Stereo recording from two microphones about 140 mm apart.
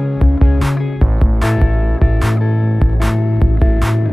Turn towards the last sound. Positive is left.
turn(degrees=0)  # may be behind; listen again after turning